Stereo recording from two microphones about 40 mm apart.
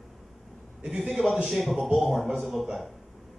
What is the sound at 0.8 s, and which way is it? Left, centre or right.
Speech, right.